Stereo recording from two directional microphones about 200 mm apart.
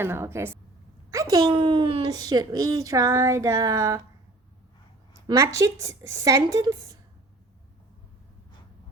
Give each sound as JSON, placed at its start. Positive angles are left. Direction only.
{"t": 0.0, "sound": "a woman's voice", "side_deg": -10}
{"t": 5.3, "sound": "a woman's voice", "side_deg": -15}